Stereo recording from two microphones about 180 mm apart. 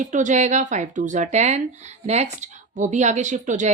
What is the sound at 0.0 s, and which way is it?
Speech, 40° right (ahead or behind).